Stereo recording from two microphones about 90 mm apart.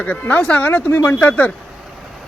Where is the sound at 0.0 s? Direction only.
20° left (ahead or behind).